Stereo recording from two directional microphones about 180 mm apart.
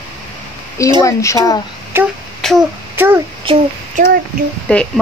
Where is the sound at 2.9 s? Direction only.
10° right (ahead or behind).